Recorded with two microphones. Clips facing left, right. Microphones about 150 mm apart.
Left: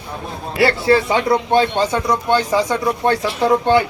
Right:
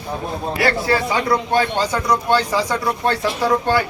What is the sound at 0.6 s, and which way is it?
Speech, 25° left (ahead or behind).